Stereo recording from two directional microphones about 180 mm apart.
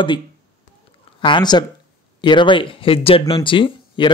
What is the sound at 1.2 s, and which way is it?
Speech, 25° left (ahead or behind).